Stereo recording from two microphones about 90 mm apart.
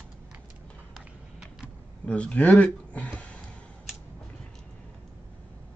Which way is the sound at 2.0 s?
15° left (ahead or behind).